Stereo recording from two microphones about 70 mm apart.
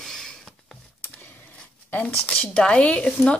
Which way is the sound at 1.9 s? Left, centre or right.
Left.